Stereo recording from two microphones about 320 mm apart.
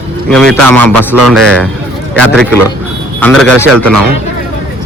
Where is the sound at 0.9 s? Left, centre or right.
Right.